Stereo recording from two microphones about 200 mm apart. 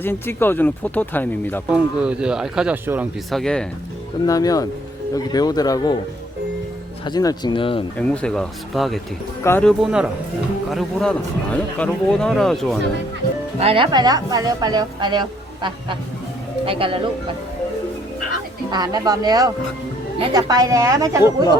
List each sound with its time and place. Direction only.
0.0 s speech: 10° left (ahead or behind)
1.7 s speech: 5° right (ahead or behind)
3.2 s speech: centre (ahead or behind)
4.3 s speech: 20° left (ahead or behind)
7.0 s speech: 20° left (ahead or behind)
7.9 s speech: 5° left (ahead or behind)
13.6 s a woman's voice: 25° right (ahead or behind)
18.7 s a woman's voice: 20° right (ahead or behind)